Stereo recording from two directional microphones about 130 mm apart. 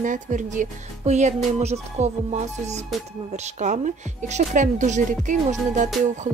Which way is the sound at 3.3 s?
65° right (ahead or behind).